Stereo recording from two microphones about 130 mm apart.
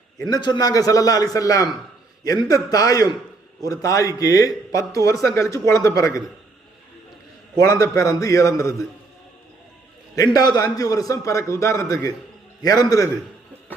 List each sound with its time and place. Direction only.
0.3 s a man's voice: 35° left (ahead or behind)
7.6 s a man's voice: 25° left (ahead or behind)
10.3 s a man's voice: 30° left (ahead or behind)